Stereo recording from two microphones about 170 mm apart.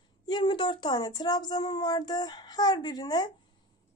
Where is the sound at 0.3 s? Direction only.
30° left (ahead or behind).